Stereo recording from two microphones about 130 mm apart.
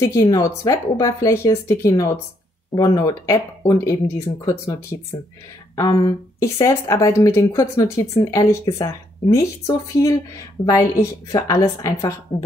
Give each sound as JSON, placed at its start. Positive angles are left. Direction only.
{"t": 0.0, "sound": "a woman's voice", "side_deg": 30}